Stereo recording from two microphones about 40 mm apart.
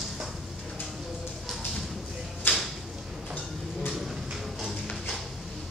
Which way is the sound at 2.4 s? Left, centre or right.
Left.